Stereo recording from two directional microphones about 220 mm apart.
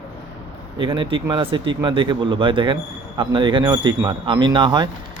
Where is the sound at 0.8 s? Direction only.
25° right (ahead or behind).